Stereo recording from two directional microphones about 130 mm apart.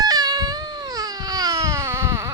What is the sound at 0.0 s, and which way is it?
Baby cry, 30° right (ahead or behind).